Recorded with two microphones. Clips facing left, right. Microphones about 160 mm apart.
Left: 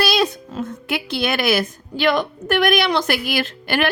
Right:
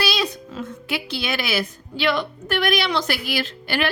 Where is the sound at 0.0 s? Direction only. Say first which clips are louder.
Left 5 dB; 50° left (ahead or behind).